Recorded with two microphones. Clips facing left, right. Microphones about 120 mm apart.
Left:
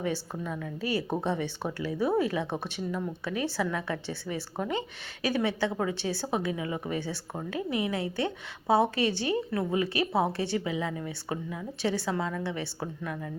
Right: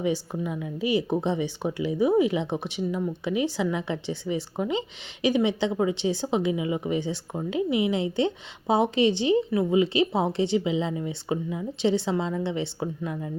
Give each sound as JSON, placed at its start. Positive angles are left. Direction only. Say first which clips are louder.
{"t": 0.0, "sound": "speech", "louder": "right 5 dB", "side_deg": -15}